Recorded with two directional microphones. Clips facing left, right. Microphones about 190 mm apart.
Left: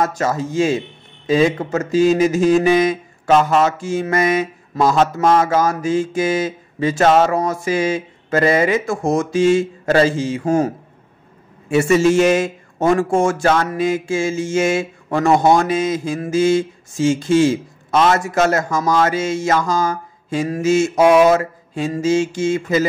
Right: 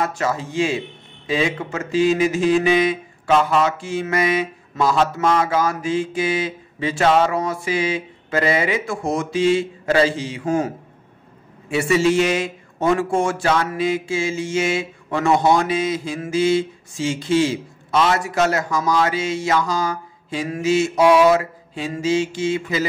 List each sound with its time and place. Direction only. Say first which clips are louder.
0.0 s a man's voice: left 3 dB; 40° left (ahead or behind)
11.7 s a man's voice: left 4 dB; 45° left (ahead or behind)